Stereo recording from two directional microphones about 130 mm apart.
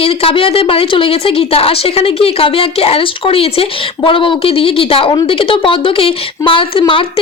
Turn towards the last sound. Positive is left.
turn(degrees=40)  # may be behind; listen again after turning